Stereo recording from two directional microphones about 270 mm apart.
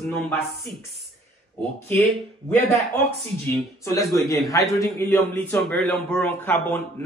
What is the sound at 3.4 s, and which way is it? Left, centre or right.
A man's voice, centre.